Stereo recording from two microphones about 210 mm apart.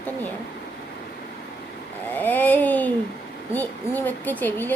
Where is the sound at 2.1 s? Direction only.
10° left (ahead or behind).